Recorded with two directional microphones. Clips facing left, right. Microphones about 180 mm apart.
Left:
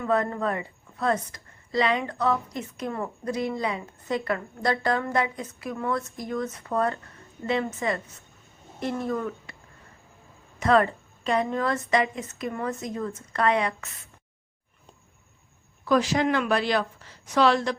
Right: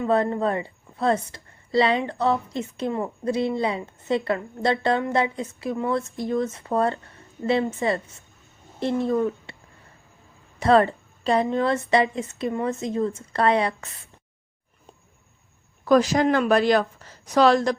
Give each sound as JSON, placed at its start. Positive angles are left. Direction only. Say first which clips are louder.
{"t": 0.0, "sound": "a woman's voice", "louder": "right 4 dB", "side_deg": -25}
{"t": 10.6, "sound": "a woman's voice", "louder": "right 3 dB", "side_deg": -30}
{"t": 15.8, "sound": "a woman's voice", "louder": "right 4 dB", "side_deg": -40}